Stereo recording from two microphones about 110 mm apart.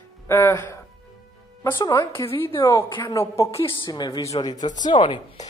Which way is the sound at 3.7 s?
40° left (ahead or behind).